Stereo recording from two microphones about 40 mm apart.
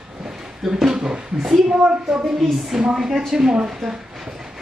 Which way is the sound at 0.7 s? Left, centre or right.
Centre.